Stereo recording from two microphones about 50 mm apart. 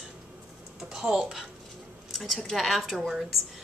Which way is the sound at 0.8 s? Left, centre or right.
Centre.